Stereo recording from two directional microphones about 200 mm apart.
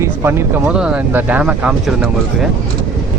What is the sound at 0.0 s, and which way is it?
Speech, 10° right (ahead or behind).